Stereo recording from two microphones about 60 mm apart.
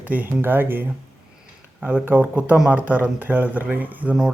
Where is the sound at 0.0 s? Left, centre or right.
Right.